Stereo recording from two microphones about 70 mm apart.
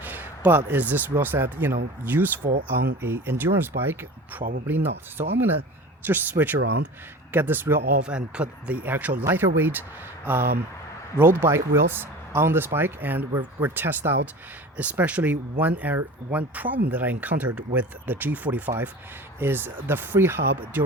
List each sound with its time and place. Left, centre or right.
0.0 s a sound: right
1.2 s speech: right
8.0 s speech: centre; by 14.2 s right
14.8 s speech: right